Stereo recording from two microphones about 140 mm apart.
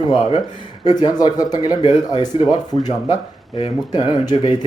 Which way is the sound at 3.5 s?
50° left (ahead or behind).